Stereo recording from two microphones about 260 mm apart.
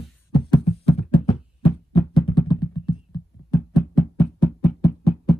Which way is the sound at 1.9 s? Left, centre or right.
Centre.